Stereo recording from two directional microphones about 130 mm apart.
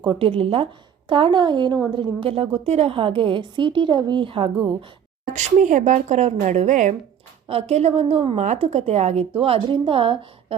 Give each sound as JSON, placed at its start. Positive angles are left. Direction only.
{"t": 0.0, "sound": "a woman's voice", "side_deg": -40}
{"t": 5.2, "sound": "speech", "side_deg": -70}
{"t": 7.4, "sound": "a woman's voice", "side_deg": -55}